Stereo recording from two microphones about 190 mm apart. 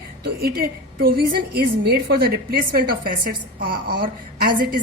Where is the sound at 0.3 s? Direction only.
55° right (ahead or behind).